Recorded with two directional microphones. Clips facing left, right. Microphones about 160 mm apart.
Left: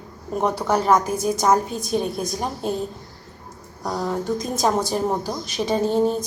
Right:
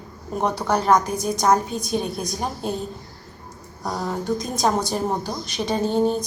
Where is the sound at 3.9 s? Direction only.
Centre (ahead or behind).